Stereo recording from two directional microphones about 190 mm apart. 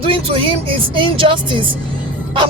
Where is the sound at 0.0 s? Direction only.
30° right (ahead or behind).